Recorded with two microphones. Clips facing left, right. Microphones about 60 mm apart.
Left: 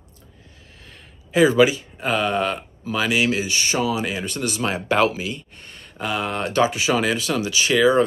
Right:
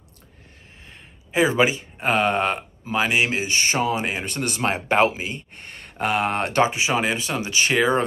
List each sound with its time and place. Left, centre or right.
0.8 s speech: right
5.6 s speech: right
6.7 s speech: right